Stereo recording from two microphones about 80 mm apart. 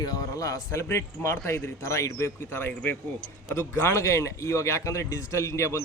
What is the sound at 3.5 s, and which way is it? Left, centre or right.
Speech, left.